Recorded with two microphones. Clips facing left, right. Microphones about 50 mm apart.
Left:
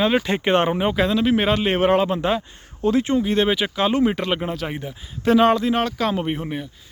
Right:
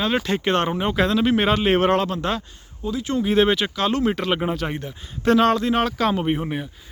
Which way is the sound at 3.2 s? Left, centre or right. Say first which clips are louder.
Right 1 dB; centre.